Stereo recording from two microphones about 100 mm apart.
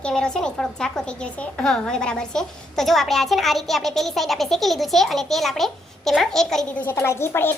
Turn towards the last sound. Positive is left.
turn(degrees=25)  # may be behind; listen again after turning